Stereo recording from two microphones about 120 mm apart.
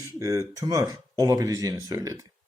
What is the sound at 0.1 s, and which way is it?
Speech, 25° right (ahead or behind).